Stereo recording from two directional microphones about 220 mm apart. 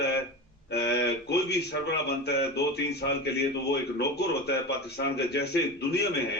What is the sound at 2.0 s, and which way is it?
A man's voice, 50° left (ahead or behind).